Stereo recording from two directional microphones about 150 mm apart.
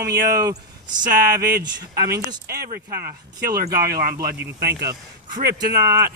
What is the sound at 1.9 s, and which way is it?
Speech, 20° right (ahead or behind).